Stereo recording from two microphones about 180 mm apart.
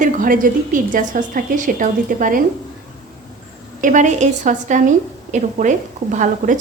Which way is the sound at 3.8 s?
45° right (ahead or behind).